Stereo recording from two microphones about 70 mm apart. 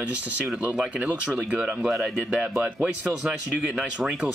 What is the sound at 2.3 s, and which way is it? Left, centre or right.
Speech, centre.